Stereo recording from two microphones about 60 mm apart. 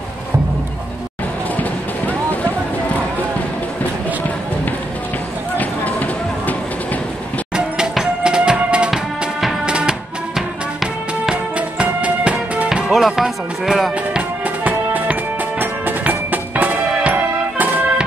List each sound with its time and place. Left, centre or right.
5.6 s a sound: left
7.5 s music: centre
10.3 s music: centre
11.5 s music: right
12.6 s music: centre
14.4 s music: right